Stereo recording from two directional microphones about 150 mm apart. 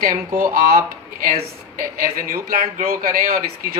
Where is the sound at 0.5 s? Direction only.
85° right.